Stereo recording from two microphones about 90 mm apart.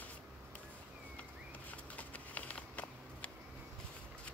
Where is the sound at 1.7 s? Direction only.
15° left (ahead or behind).